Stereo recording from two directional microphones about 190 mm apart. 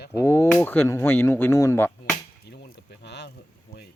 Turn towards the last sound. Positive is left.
turn(degrees=60)  # may be behind; listen again after turning